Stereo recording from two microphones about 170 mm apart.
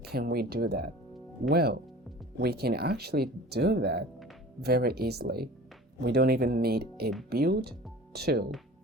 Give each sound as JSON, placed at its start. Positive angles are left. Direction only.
{"t": 0.0, "sound": "speech", "side_deg": -70}